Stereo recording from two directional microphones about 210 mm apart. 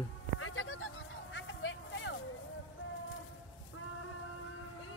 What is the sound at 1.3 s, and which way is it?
Vehicle, 65° left (ahead or behind).